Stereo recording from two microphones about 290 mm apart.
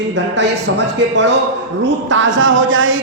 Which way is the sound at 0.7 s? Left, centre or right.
Right.